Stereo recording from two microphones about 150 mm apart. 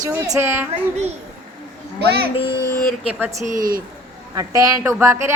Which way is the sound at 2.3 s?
35° left (ahead or behind).